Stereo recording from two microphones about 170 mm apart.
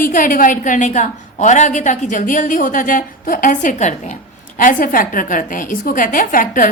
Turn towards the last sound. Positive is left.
turn(degrees=55)  # may be behind; listen again after turning